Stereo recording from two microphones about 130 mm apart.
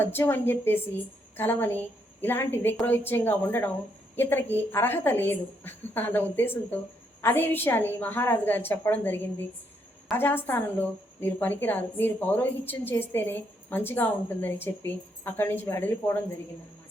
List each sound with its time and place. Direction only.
0.0 s a woman's voice: 15° left (ahead or behind)